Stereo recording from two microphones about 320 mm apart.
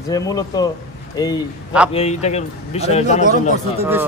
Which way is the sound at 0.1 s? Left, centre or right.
Centre.